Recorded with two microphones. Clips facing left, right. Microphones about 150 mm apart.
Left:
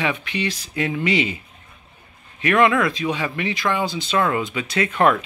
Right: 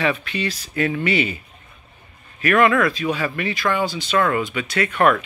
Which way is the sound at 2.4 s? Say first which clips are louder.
Right 1 dB; 20° left (ahead or behind).